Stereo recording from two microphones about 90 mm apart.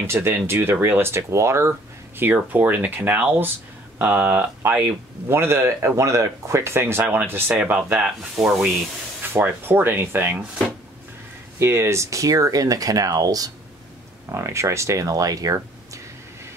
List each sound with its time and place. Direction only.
0.0 s speech: 30° right (ahead or behind)
2.1 s speech: 20° right (ahead or behind)
9.2 s speech: 25° right (ahead or behind)
11.6 s speech: 30° right (ahead or behind)
14.3 s speech: 35° right (ahead or behind)